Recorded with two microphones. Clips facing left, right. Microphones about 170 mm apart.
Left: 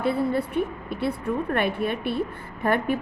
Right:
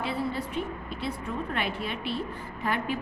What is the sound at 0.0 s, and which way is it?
A woman's voice, 55° left (ahead or behind).